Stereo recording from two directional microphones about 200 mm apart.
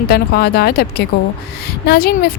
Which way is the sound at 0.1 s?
50° left (ahead or behind).